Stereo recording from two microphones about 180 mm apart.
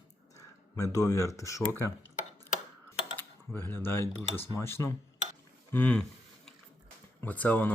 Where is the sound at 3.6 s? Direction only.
10° left (ahead or behind).